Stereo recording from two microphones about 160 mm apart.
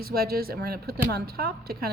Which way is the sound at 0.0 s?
70° right (ahead or behind).